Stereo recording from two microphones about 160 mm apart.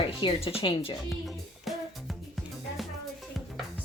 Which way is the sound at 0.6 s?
35° left (ahead or behind).